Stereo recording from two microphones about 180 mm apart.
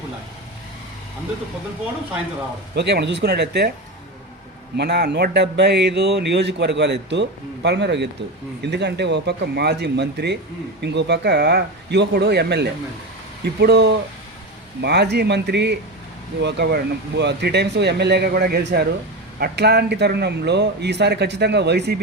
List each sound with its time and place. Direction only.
2.7 s speech: 70° right (ahead or behind)
4.8 s speech: 65° right (ahead or behind)